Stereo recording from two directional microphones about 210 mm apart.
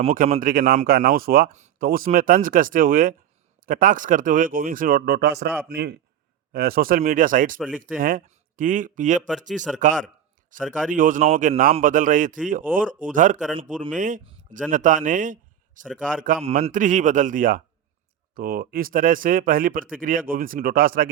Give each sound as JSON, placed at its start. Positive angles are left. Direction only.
{"t": 0.0, "sound": "a man's voice", "side_deg": -40}